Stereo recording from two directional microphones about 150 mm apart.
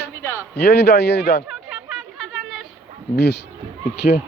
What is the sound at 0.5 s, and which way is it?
Speech, 90° left.